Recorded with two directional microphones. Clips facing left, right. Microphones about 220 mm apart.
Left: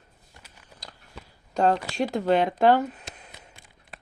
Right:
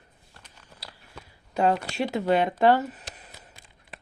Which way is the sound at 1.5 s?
5° right (ahead or behind).